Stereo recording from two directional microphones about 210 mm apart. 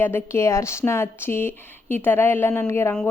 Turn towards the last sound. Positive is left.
turn(degrees=10)  # may be behind; listen again after turning